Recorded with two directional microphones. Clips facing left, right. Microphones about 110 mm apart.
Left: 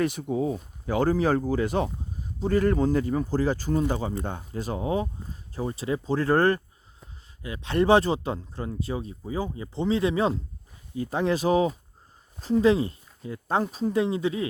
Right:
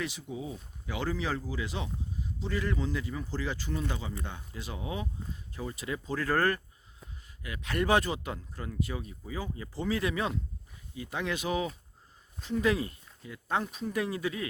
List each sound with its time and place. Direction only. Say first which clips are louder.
0.0 s speech: left 11 dB; 50° left (ahead or behind); by 14.4 s 25° left (ahead or behind)